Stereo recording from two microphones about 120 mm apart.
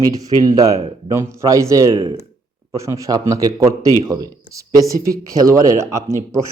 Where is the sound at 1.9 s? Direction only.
45° right (ahead or behind).